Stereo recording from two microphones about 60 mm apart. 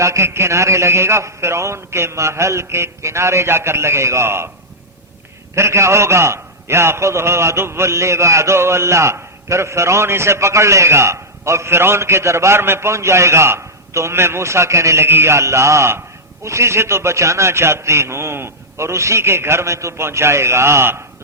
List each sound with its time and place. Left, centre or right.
0.0 s a man's voice: right
5.5 s a man's voice: right